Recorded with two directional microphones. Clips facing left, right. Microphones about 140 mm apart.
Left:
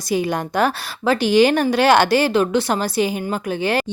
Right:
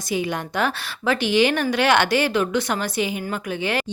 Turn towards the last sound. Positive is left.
turn(degrees=35)  # may be behind; listen again after turning